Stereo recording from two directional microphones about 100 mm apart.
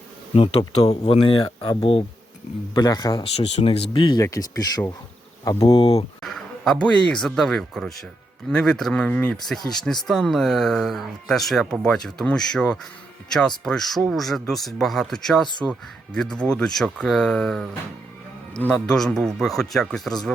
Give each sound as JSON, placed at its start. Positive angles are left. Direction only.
{"t": 0.3, "sound": "speech", "side_deg": 75}
{"t": 0.9, "sound": "speech", "side_deg": 90}
{"t": 1.7, "sound": "speech", "side_deg": 75}
{"t": 2.7, "sound": "speech", "side_deg": 40}
{"t": 3.3, "sound": "speech", "side_deg": 85}
{"t": 3.9, "sound": "speech", "side_deg": 45}
{"t": 5.6, "sound": "speech", "side_deg": 60}
{"t": 6.2, "sound": "a man's voice", "side_deg": 5}
{"t": 9.7, "sound": "speech", "side_deg": 5}
{"t": 18.7, "sound": "speech", "side_deg": 5}